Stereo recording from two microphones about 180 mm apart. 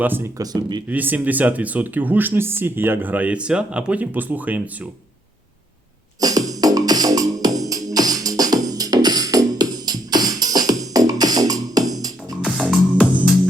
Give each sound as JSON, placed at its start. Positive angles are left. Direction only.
{"t": 0.0, "sound": "speech", "side_deg": -10}
{"t": 0.9, "sound": "speech", "side_deg": -10}
{"t": 6.1, "sound": "music", "side_deg": -20}
{"t": 12.4, "sound": "music", "side_deg": 0}